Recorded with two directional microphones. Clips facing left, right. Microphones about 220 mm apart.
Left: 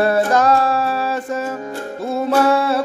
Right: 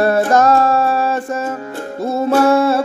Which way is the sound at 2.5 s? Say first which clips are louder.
Right 4 dB; 45° right (ahead or behind).